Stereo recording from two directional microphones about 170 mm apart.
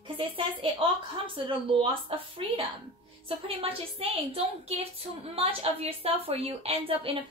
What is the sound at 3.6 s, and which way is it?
A woman's voice, 35° right (ahead or behind).